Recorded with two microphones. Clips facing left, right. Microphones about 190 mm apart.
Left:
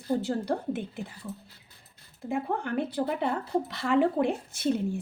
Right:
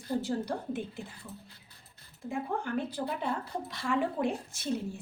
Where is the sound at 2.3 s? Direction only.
60° left (ahead or behind).